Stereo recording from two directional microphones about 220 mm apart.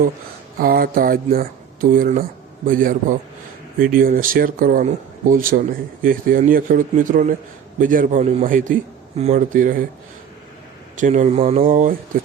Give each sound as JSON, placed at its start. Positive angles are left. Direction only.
{"t": 0.6, "sound": "speech", "side_deg": -40}
{"t": 11.0, "sound": "speech", "side_deg": -35}